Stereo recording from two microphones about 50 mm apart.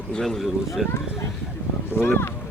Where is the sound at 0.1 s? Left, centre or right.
Centre.